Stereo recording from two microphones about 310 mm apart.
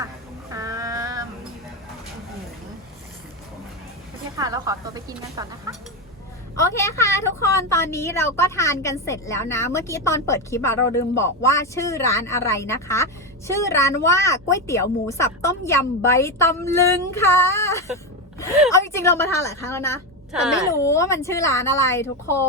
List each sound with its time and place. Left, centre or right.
0.5 s a sound: centre
4.4 s speech: centre
6.6 s a woman's voice: centre
20.3 s speech: centre
20.8 s a woman's voice: centre